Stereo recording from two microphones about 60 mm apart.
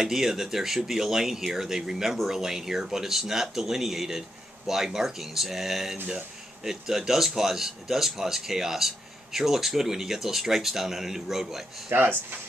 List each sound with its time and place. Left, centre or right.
0.0 s a man's voice: centre
11.9 s speech: right